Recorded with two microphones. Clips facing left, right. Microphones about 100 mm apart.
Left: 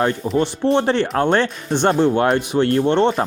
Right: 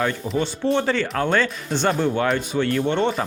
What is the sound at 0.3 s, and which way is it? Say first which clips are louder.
Speech: left 4 dB; 65° left (ahead or behind).